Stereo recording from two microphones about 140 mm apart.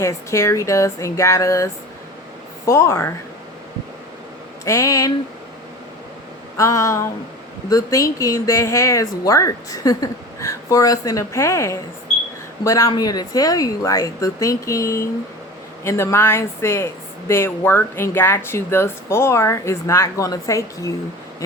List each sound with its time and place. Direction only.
0.0 s speech: 20° left (ahead or behind)
4.6 s speech: 20° left (ahead or behind)
6.6 s speech: 20° left (ahead or behind)